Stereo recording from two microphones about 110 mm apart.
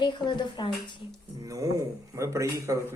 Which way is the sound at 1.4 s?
30° right (ahead or behind).